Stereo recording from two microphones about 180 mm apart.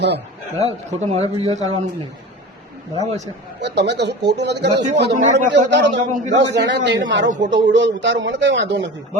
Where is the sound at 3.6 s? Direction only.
70° right (ahead or behind).